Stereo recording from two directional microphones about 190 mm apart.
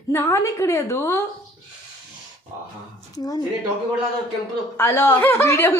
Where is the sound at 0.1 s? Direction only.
15° left (ahead or behind).